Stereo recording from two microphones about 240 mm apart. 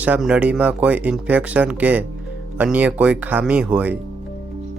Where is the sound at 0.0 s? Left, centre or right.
Centre.